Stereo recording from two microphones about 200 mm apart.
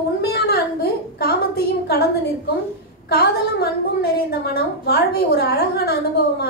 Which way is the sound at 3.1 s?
50° left (ahead or behind).